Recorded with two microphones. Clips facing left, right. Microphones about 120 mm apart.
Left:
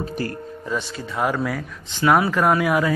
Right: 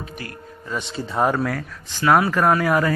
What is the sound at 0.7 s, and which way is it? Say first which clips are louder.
Speech: right 3 dB; 25° right (ahead or behind).